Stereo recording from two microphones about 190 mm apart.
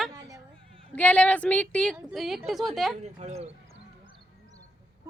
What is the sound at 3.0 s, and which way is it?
Speech, 35° right (ahead or behind).